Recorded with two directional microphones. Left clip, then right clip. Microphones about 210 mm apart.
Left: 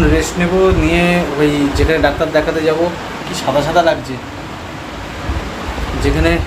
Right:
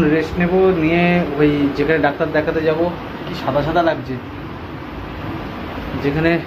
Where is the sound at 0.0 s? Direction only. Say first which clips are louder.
Left 2 dB; 15° left (ahead or behind).